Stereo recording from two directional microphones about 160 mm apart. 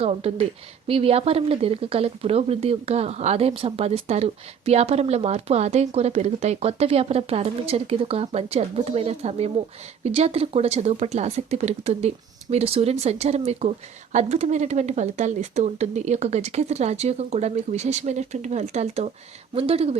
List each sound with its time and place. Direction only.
0.0 s speech: 40° right (ahead or behind)